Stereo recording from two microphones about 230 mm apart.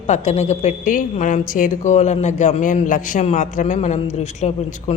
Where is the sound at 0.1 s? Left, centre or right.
Left.